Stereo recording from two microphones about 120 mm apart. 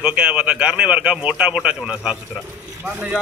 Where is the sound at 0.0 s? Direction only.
10° right (ahead or behind).